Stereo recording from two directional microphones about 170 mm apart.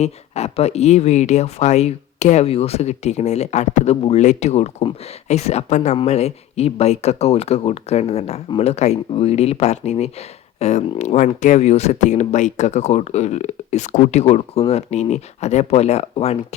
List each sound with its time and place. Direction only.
0.0 s speech: 40° left (ahead or behind)